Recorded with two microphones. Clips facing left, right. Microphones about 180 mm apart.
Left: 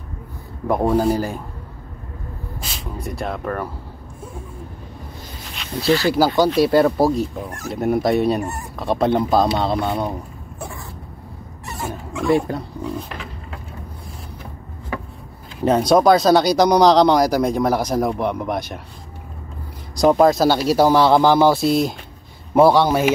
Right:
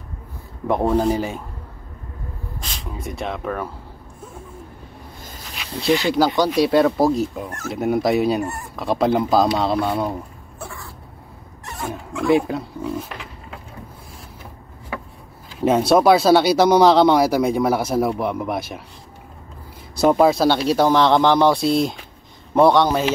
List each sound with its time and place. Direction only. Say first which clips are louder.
0.7 s speech: left 1 dB; 5° left (ahead or behind)
2.6 s speech: left 1 dB; centre (ahead or behind)
5.5 s snake: left 3 dB; centre (ahead or behind)
5.9 s speech: left 1 dB; 20° right (ahead or behind)
6.1 s speech: left 2 dB; 5° left (ahead or behind)
7.4 s speech: even; 15° left (ahead or behind)
7.7 s speech: left 1 dB; centre (ahead or behind)
11.6 s speech: even; centre (ahead or behind)
15.6 s speech: even; 5° right (ahead or behind)
20.0 s speech: left 1 dB; 5° right (ahead or behind)